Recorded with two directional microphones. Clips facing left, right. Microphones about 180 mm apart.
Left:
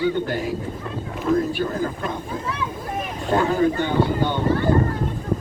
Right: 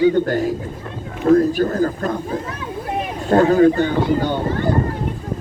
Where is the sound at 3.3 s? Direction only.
45° right (ahead or behind).